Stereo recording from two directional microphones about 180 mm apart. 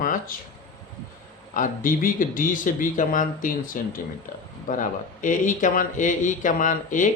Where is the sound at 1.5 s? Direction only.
50° left (ahead or behind).